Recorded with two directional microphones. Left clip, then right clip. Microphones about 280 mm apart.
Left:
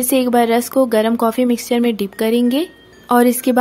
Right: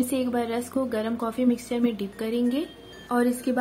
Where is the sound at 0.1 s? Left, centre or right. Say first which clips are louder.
Left 13 dB; left.